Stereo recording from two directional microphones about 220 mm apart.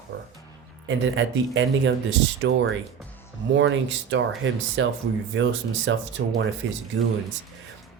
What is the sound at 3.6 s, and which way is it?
Speech, 60° right (ahead or behind).